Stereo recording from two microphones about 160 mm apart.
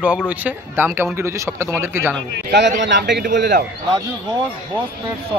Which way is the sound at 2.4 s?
80° right.